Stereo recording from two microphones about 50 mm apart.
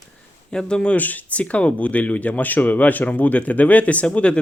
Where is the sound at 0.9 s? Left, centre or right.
Left.